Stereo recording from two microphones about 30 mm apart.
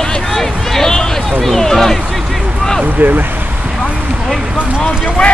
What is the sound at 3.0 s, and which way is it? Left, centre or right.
Speech, right.